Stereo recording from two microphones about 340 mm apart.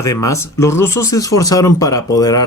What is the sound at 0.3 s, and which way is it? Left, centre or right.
Speech, centre.